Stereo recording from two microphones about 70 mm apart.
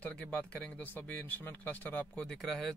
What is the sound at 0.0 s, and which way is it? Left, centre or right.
Speech, centre.